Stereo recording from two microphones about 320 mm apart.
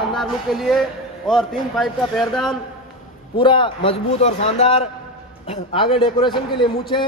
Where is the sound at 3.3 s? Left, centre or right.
Centre.